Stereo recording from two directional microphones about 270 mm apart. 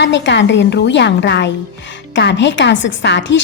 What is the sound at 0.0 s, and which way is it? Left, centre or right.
Speech, left.